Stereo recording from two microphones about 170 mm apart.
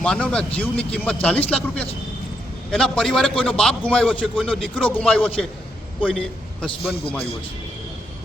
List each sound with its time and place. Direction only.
0.0 s a man's voice: 5° left (ahead or behind)
6.7 s a man's voice: 35° left (ahead or behind)